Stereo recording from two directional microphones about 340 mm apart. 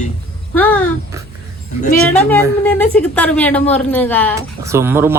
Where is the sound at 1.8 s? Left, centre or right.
Left.